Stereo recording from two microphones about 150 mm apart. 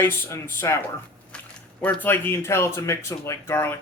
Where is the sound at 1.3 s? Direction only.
10° left (ahead or behind).